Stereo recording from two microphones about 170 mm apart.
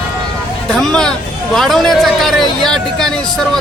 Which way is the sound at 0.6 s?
5° left (ahead or behind).